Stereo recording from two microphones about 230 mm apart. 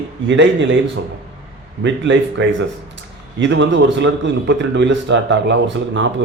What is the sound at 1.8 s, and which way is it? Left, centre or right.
A man's voice, right.